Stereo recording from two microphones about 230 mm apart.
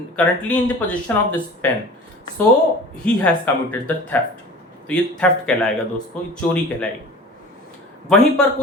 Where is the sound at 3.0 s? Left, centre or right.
Centre.